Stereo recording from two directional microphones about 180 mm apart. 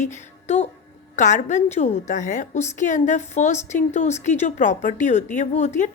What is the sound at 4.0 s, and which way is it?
Speech, 40° left (ahead or behind).